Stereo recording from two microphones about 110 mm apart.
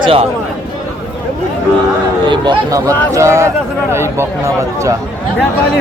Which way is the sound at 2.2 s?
45° right (ahead or behind).